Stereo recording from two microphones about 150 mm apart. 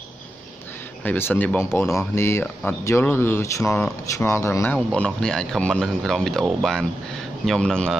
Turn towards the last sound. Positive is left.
turn(degrees=5)  # may be behind; listen again after turning